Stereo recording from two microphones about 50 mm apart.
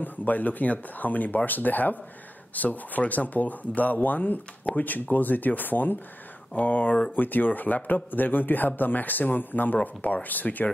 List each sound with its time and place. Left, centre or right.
0.0 s a man's voice: left